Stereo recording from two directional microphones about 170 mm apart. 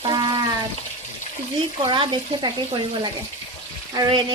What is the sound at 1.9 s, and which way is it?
Speech, 30° right (ahead or behind).